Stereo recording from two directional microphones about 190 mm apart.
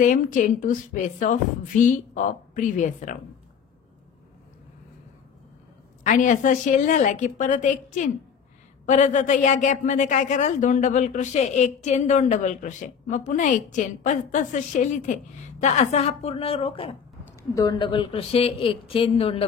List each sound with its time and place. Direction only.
0.0 s a woman's voice: 45° left (ahead or behind)
6.0 s a woman's voice: 40° left (ahead or behind)
17.4 s speech: 20° left (ahead or behind)